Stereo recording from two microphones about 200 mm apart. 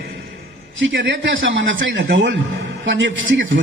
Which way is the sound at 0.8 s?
65° right (ahead or behind).